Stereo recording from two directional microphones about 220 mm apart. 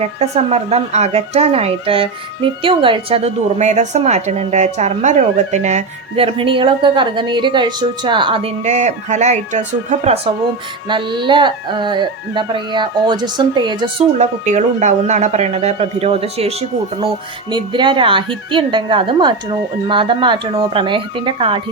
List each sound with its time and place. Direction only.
0.0 s speech: 30° right (ahead or behind)
14.2 s speech: 35° right (ahead or behind)